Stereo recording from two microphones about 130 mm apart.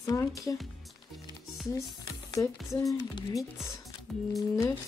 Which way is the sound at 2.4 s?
20° left (ahead or behind).